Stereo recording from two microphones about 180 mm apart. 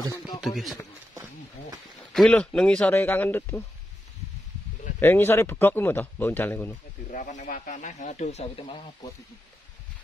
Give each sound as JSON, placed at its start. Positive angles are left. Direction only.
{"t": 0.4, "sound": "speech", "side_deg": 0}
{"t": 2.1, "sound": "speech", "side_deg": 5}
{"t": 5.0, "sound": "speech", "side_deg": 10}
{"t": 7.1, "sound": "speech", "side_deg": 45}